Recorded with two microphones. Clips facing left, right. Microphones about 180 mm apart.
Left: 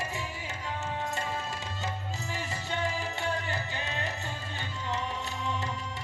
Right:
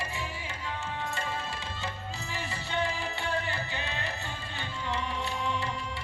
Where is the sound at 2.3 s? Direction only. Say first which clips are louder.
Even; 45° left (ahead or behind).